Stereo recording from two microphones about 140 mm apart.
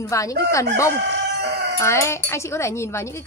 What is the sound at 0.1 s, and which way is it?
A woman's voice, 20° left (ahead or behind).